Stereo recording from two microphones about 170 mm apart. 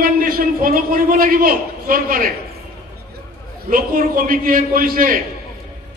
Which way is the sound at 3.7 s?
55° right (ahead or behind).